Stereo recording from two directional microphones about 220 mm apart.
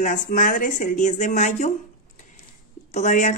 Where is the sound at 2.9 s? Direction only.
35° left (ahead or behind).